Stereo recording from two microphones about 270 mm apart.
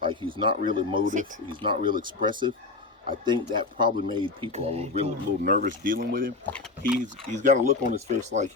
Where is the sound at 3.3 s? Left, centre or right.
Centre; by 6.3 s right.